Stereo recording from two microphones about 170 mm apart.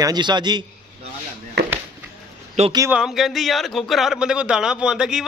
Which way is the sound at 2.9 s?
Centre (ahead or behind).